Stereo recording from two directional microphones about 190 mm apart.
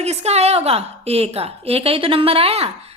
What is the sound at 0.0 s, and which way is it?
A woman's voice, 35° right (ahead or behind).